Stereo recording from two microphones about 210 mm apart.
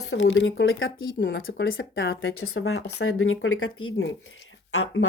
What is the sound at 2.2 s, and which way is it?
Speech, 80° left.